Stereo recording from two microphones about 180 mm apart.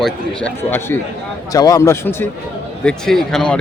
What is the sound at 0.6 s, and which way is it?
Speech, 15° left (ahead or behind).